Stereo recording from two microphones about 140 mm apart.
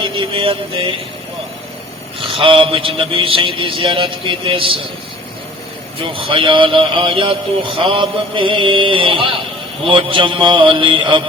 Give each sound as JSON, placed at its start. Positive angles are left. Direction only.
{"t": 0.0, "sound": "a man's voice", "side_deg": -35}
{"t": 2.2, "sound": "a man's voice", "side_deg": -40}
{"t": 6.0, "sound": "a man's voice", "side_deg": -40}